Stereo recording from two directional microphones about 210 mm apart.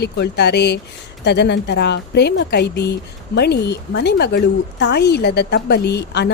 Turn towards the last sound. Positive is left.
turn(degrees=55)  # may be behind; listen again after turning